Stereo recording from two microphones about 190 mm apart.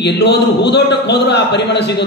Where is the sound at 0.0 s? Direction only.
65° left (ahead or behind).